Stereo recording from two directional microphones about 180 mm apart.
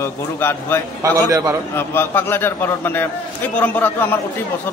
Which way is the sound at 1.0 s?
20° right (ahead or behind).